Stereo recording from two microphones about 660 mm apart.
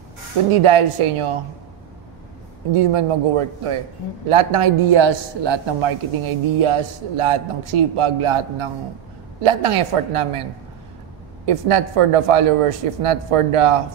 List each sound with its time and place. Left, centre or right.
0.5 s a man's voice: right
2.7 s a man's voice: right
11.4 s a man's voice: right